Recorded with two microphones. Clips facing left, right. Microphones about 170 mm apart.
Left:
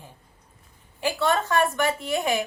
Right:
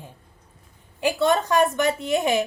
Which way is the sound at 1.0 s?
20° right (ahead or behind).